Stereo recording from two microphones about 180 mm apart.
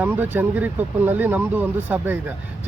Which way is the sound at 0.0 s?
10° right (ahead or behind).